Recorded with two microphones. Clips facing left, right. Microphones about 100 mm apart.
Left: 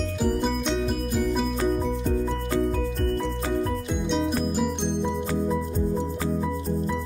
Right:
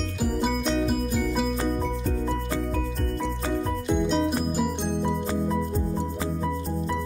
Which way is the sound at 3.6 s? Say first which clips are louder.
Right 2 dB; centre (ahead or behind).